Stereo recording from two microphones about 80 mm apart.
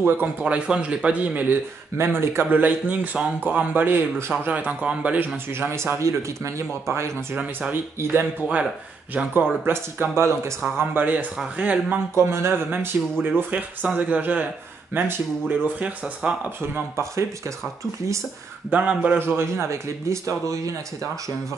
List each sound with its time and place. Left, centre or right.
0.0 s speech: right
2.0 s speech: right; by 5.4 s centre
5.5 s speech: right; by 12.0 s centre
12.2 s speech: right
18.7 s speech: right